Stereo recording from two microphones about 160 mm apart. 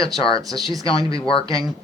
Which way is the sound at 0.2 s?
35° left (ahead or behind).